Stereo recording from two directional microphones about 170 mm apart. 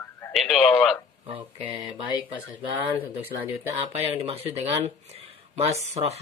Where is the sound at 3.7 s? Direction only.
35° right (ahead or behind).